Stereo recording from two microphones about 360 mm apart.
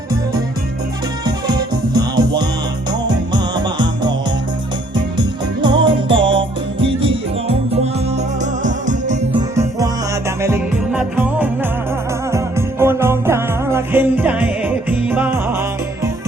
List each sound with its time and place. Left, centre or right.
1.2 s music: centre
5.6 s music: centre
9.6 s music: centre